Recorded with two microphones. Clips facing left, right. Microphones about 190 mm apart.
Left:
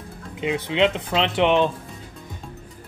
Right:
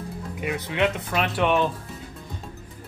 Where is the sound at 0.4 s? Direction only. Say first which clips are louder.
Left 4 dB; 20° left (ahead or behind).